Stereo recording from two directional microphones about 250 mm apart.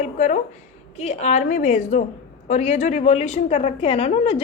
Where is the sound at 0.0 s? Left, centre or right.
Left.